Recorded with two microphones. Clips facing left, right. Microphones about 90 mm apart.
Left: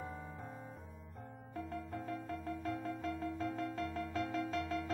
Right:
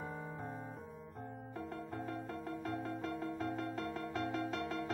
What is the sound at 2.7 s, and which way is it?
Music, 40° right (ahead or behind).